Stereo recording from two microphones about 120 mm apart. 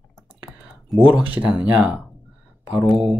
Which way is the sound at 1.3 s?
10° right (ahead or behind).